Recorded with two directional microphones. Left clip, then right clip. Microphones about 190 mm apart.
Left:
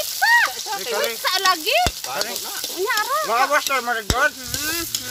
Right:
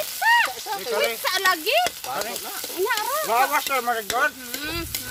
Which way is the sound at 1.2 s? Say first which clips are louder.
Left 2 dB; 25° right (ahead or behind).